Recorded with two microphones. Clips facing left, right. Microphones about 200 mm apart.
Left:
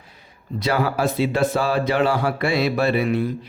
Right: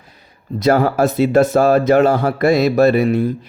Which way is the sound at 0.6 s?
45° right (ahead or behind).